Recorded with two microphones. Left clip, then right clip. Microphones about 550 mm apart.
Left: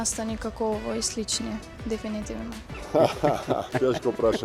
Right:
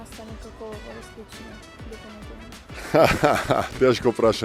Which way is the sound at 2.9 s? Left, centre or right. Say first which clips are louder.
Right 4 dB; right.